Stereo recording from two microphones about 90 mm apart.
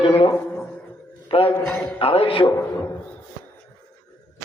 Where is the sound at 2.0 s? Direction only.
90° left.